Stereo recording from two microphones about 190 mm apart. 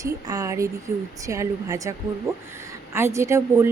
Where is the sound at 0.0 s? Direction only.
15° right (ahead or behind).